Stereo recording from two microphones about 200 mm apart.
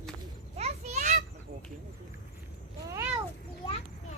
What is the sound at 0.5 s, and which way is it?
Children playing, 35° right (ahead or behind).